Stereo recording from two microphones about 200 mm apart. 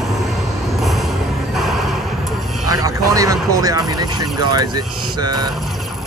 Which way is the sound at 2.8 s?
15° right (ahead or behind).